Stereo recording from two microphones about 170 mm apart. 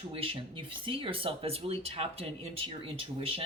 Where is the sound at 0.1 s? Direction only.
30° right (ahead or behind).